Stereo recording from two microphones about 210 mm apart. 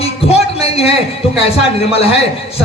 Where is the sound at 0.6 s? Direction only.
30° left (ahead or behind).